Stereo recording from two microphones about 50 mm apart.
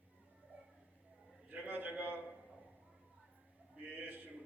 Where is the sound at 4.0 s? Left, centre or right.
Right.